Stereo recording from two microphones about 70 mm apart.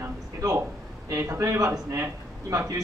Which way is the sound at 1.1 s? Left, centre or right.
Right.